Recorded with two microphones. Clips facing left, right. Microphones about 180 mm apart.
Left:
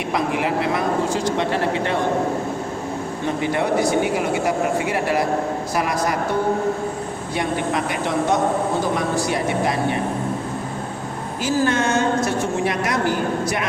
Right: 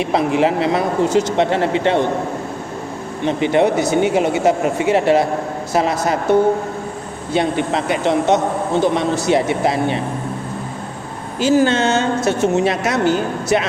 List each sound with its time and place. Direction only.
0.1 s speech: 25° right (ahead or behind)
3.2 s speech: 25° right (ahead or behind)
7.3 s speech: 25° right (ahead or behind)
11.3 s speech: 25° right (ahead or behind)